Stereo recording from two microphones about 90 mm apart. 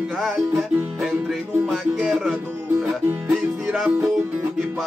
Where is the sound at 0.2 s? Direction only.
Centre (ahead or behind).